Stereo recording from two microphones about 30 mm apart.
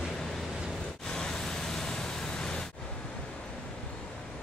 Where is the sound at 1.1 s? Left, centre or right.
Left.